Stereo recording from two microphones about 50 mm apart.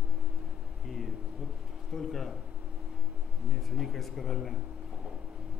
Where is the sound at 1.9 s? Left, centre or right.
Centre.